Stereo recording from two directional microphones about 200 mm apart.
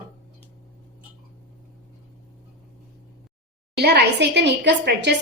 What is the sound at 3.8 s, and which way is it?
A woman's voice, 55° right (ahead or behind).